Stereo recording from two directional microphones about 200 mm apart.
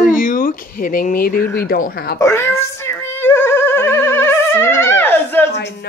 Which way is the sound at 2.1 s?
10° left (ahead or behind).